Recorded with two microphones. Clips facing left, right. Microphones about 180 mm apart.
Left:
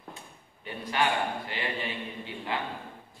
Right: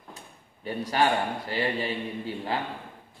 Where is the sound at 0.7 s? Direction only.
40° right (ahead or behind).